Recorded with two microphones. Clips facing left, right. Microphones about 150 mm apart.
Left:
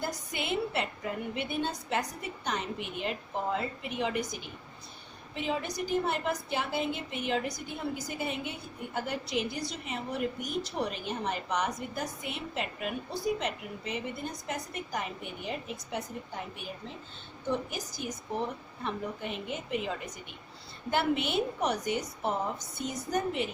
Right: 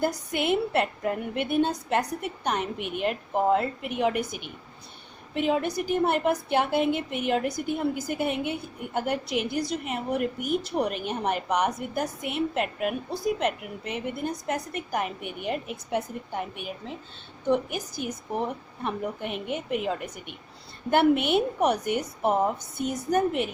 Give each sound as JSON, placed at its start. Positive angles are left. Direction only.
{"t": 0.0, "sound": "a woman's voice", "side_deg": -55}